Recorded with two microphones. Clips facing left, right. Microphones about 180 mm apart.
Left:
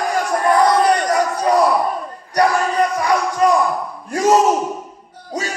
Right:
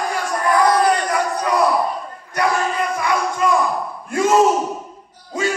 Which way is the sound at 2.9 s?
40° left (ahead or behind).